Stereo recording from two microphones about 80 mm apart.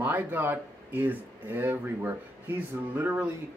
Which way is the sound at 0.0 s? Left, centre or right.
Right.